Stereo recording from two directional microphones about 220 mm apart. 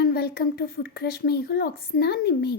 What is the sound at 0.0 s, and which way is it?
A woman's voice, 45° left (ahead or behind).